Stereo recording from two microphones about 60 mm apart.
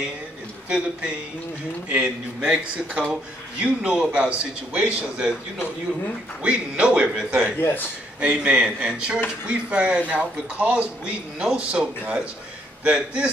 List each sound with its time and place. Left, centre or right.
0.7 s speech: centre
6.4 s a man's voice: centre